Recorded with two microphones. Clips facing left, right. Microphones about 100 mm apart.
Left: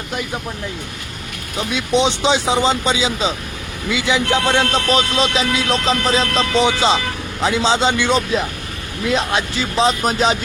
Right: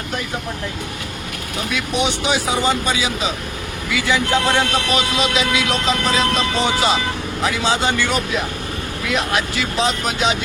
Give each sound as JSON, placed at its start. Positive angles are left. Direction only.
{"t": 1.7, "sound": "speech", "side_deg": 25}
{"t": 4.9, "sound": "music", "side_deg": 30}
{"t": 6.6, "sound": "speech", "side_deg": 20}
{"t": 9.0, "sound": "music", "side_deg": 30}